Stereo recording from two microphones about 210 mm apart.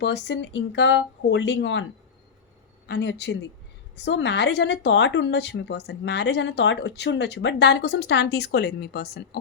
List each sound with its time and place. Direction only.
0.0 s speech: 55° left (ahead or behind)
2.8 s speech: 55° left (ahead or behind)